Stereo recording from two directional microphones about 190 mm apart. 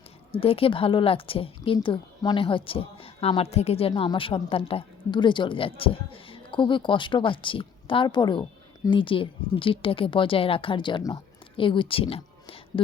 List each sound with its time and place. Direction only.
0.3 s speech: 30° left (ahead or behind)